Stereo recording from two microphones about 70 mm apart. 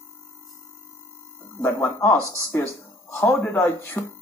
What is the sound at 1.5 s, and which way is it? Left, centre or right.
Speech, left.